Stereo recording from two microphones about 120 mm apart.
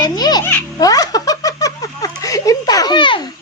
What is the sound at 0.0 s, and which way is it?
Music, 35° left (ahead or behind).